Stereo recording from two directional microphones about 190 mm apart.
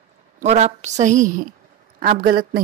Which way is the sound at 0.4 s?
35° right (ahead or behind).